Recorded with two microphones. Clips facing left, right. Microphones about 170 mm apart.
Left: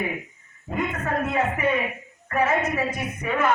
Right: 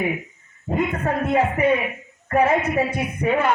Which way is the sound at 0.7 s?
35° right (ahead or behind).